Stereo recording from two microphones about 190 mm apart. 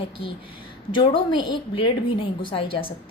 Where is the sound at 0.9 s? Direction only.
25° left (ahead or behind).